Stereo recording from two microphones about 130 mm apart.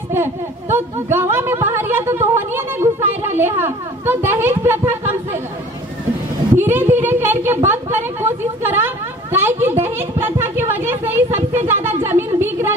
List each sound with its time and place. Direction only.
0.1 s speech: 20° right (ahead or behind)
6.5 s a woman's voice: 15° right (ahead or behind)